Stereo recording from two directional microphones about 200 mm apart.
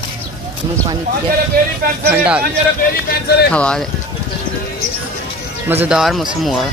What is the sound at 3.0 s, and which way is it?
Speech, 55° left (ahead or behind).